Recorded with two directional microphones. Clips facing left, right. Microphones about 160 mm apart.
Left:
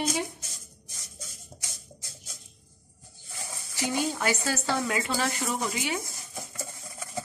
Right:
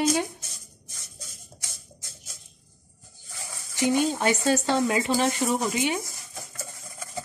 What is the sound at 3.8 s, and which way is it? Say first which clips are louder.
Speech: right 6 dB; 20° right (ahead or behind).